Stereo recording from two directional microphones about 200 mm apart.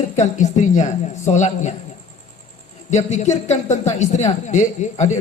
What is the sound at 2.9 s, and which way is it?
A man's voice, 35° left (ahead or behind).